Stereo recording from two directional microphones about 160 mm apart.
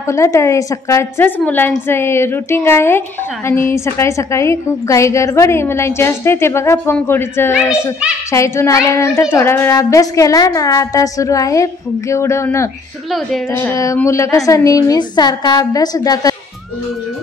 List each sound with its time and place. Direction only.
0.0 s a woman's voice: 20° left (ahead or behind)